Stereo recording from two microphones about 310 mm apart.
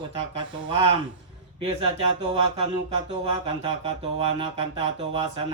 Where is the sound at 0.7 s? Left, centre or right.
Centre.